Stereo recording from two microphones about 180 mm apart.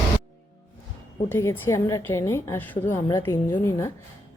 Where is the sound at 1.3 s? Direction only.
15° left (ahead or behind).